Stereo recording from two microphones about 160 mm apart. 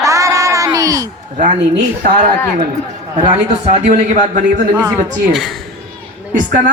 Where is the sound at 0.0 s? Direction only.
20° right (ahead or behind).